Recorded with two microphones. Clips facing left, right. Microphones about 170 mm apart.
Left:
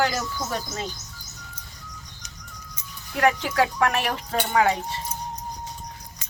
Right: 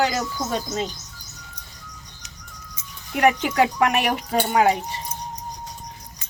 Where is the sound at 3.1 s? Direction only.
15° right (ahead or behind).